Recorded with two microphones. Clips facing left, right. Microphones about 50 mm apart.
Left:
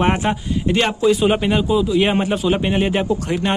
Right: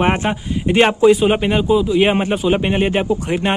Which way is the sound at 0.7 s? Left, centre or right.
Right.